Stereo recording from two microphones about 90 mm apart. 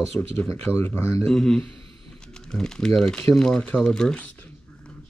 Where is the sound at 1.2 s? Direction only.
5° left (ahead or behind).